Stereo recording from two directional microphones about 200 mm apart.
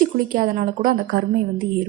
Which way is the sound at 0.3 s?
45° right (ahead or behind).